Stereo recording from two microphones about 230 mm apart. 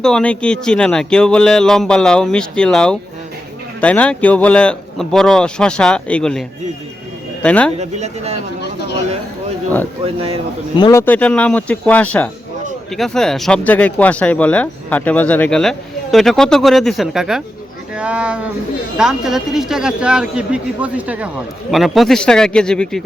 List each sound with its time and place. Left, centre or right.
0.0 s speech: centre
7.4 s speech: centre
7.8 s speech: right
10.0 s speech: right
10.8 s speech: centre